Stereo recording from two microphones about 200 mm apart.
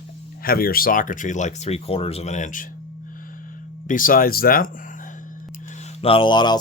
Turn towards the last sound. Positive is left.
turn(degrees=20)  # may be behind; listen again after turning